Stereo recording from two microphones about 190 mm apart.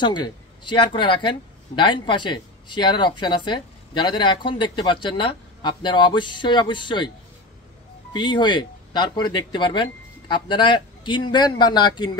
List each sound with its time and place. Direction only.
0.0 s speech: 25° left (ahead or behind)
8.1 s speech: 25° left (ahead or behind)